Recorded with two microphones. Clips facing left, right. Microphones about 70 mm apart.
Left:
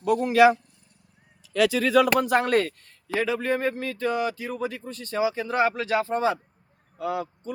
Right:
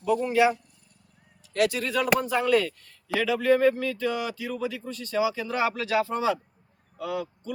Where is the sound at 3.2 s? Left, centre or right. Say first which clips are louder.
Right 5 dB; left.